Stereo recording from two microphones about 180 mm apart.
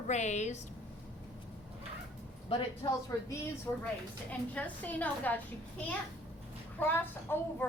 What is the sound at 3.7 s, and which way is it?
A woman's voice, 15° left (ahead or behind).